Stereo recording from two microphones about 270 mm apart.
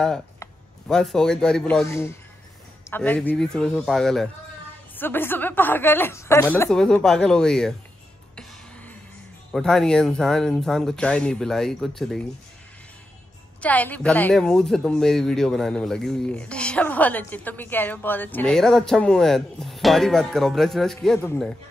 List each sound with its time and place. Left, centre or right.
0.0 s a man's voice: centre
9.5 s speech: centre
13.6 s speech: centre